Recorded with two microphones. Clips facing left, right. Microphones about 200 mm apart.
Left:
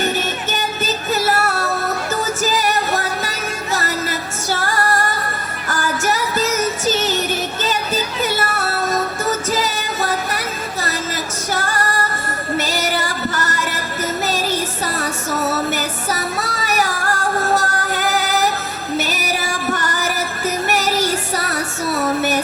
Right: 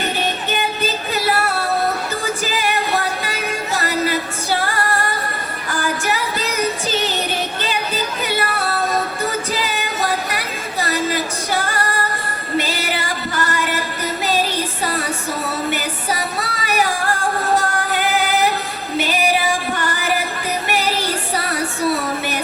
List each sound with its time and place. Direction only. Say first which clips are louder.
0.0 s music: left 1 dB; 45° left (ahead or behind)
8.2 s music: right 1 dB; 45° left (ahead or behind)
11.6 s female singing: left 1 dB; 45° left (ahead or behind)
12.5 s music: even; 45° left (ahead or behind)
15.7 s music: left 1 dB; 45° left (ahead or behind)